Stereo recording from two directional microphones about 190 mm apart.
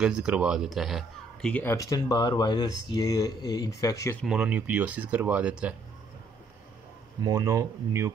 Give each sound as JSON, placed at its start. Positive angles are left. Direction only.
{"t": 0.0, "sound": "speech", "side_deg": -5}
{"t": 4.2, "sound": "speech", "side_deg": -5}
{"t": 7.2, "sound": "speech", "side_deg": -20}